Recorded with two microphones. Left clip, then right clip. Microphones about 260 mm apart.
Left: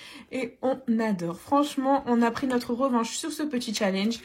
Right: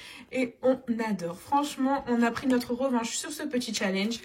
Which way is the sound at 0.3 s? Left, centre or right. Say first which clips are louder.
Right 2 dB; centre.